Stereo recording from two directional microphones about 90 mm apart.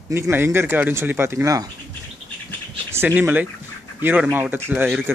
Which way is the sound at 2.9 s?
25° right (ahead or behind).